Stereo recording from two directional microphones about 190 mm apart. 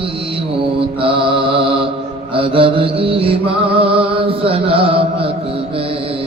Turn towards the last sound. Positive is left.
turn(degrees=-30)  # may be behind; listen again after turning